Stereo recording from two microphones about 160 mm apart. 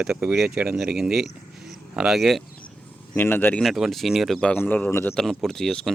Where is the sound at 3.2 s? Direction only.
10° left (ahead or behind).